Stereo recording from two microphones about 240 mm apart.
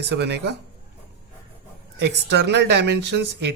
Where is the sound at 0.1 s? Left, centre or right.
Right.